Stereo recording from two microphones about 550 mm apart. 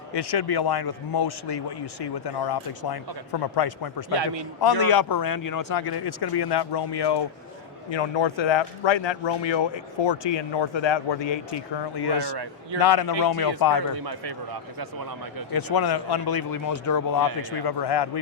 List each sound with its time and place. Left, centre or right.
0.1 s speech: left
15.5 s speech: left
17.7 s speech: left